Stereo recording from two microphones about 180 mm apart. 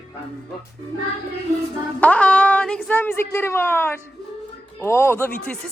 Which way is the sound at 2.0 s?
5° left (ahead or behind).